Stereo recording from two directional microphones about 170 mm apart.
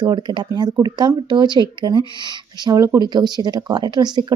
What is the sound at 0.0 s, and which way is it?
Speech, 25° right (ahead or behind).